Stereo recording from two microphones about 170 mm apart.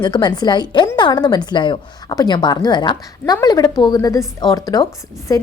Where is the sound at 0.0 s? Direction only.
25° left (ahead or behind).